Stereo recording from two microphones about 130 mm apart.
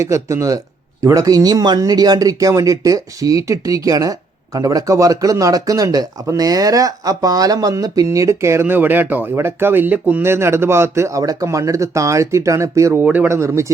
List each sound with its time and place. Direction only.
0.0 s speech: 20° right (ahead or behind)